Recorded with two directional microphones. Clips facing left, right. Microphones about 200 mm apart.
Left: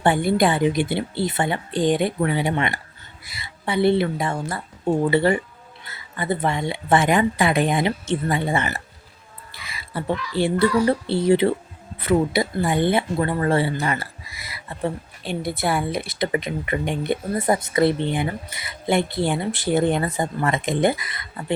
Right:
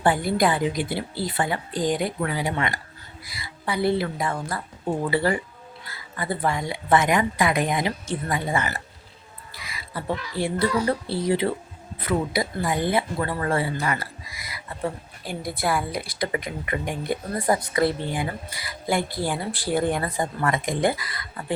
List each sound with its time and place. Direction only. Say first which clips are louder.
0.0 s a woman's voice: left 3 dB; 25° left (ahead or behind)
9.5 s a sound: left 2 dB; 25° left (ahead or behind)
10.4 s a woman's voice: left 5 dB; 25° left (ahead or behind)